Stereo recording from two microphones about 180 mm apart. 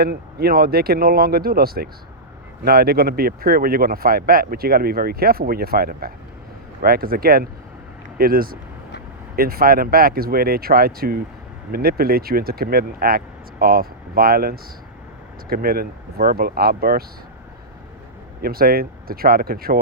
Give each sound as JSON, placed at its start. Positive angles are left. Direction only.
{"t": 0.0, "sound": "speech", "side_deg": -60}
{"t": 18.4, "sound": "speech", "side_deg": -55}